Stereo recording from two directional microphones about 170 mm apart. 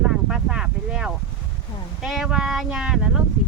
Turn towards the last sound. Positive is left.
turn(degrees=-5)  # may be behind; listen again after turning